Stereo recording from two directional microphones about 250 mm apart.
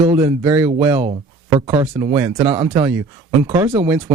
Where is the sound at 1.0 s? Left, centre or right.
Right.